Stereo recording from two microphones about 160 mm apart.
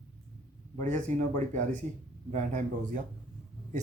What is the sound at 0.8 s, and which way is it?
Speech, 50° right (ahead or behind).